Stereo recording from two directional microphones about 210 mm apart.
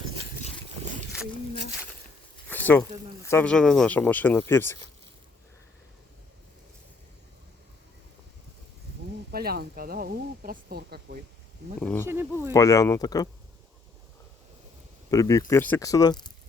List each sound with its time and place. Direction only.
2.5 s a sound: 10° left (ahead or behind)
3.2 s speech: 5° left (ahead or behind)
9.3 s speech: 45° right (ahead or behind)
11.8 s speech: 5° left (ahead or behind)
12.0 s speech: 10° right (ahead or behind)
12.5 s speech: 15° left (ahead or behind)
15.1 s speech: 15° left (ahead or behind)